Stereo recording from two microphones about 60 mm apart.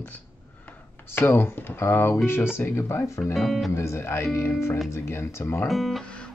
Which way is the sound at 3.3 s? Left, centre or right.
Centre.